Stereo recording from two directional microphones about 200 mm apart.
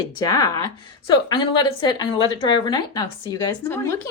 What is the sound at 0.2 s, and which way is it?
Speech, 20° left (ahead or behind).